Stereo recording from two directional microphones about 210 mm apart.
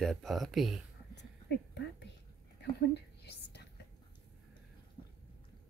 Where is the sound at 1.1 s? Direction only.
55° left (ahead or behind).